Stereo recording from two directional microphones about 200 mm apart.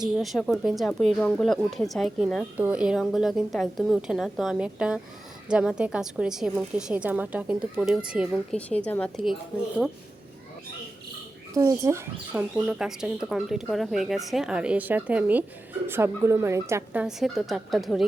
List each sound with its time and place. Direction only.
0.0 s speech: centre (ahead or behind)
8.5 s speech: 5° left (ahead or behind)
11.5 s speech: 15° right (ahead or behind)